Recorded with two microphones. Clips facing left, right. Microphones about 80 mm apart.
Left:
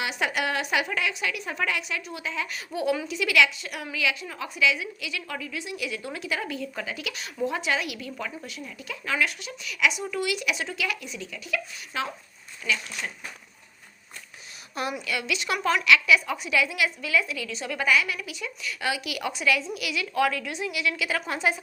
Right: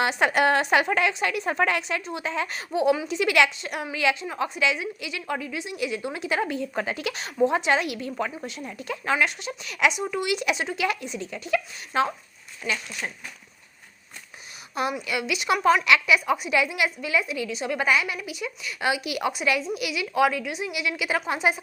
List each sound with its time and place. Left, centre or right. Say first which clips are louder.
0.0 s a woman's voice: right 6 dB; right
9.9 s a woman's voice: right 2 dB; right
15.0 s a woman's voice: right 3 dB; centre